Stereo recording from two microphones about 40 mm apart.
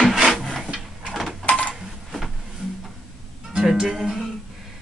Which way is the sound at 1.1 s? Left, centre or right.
Centre.